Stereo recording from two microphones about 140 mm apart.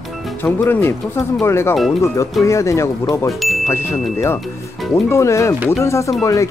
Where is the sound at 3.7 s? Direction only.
15° left (ahead or behind).